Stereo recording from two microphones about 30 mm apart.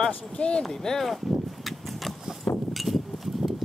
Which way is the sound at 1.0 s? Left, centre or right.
Centre.